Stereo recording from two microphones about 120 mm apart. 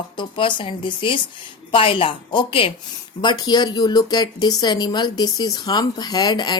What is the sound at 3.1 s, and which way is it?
Speech, 35° left (ahead or behind).